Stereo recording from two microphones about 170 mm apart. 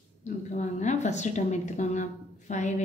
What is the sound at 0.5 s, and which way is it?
A woman's voice, 45° left (ahead or behind).